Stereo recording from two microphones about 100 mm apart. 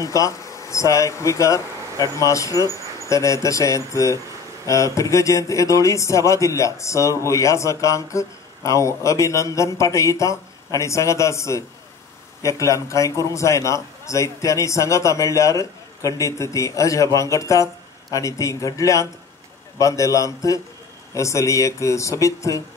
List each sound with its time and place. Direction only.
0.0 s speech: 35° left (ahead or behind)